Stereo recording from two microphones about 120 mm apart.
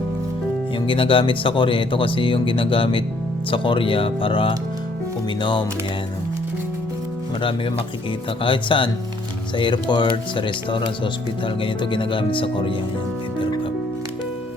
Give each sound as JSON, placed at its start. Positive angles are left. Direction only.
{"t": 0.9, "sound": "speech", "side_deg": 45}
{"t": 8.4, "sound": "speech", "side_deg": 45}